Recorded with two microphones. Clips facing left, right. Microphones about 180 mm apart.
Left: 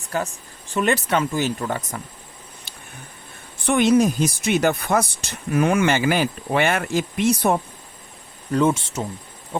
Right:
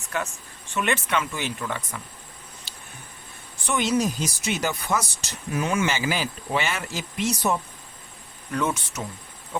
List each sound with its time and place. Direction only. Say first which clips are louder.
0.0 s speech: left 4 dB; 35° left (ahead or behind)
2.7 s a sound: left 2 dB; 55° left (ahead or behind)
3.6 s speech: left 7 dB; 55° left (ahead or behind)
8.5 s speech: left 7 dB; 30° left (ahead or behind)